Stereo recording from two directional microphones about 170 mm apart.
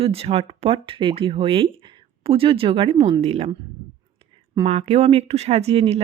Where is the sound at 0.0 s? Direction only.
35° right (ahead or behind).